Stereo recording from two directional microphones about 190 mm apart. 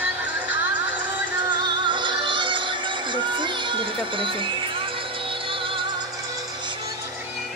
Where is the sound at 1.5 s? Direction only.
25° right (ahead or behind).